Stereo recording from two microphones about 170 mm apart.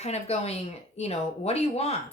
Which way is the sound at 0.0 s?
40° left (ahead or behind).